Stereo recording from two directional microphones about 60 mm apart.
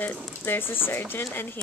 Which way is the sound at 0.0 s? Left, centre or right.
Left.